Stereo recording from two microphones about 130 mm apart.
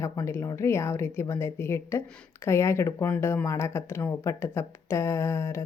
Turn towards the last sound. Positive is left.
turn(degrees=20)  # may be behind; listen again after turning